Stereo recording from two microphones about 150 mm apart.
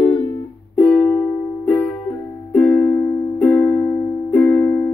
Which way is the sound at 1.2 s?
10° left (ahead or behind).